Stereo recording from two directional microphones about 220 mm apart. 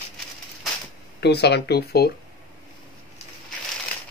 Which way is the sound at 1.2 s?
50° left (ahead or behind).